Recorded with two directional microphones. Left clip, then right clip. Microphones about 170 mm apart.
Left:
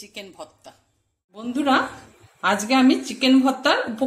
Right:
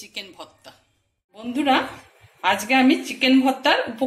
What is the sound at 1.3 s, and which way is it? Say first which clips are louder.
Speech: even; 75° left (ahead or behind).